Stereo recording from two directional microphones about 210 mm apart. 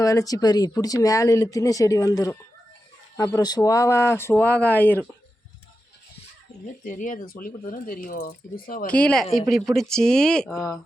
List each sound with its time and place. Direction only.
0.0 s speech: 15° left (ahead or behind)
6.7 s speech: 40° left (ahead or behind)
8.9 s speech: 5° left (ahead or behind)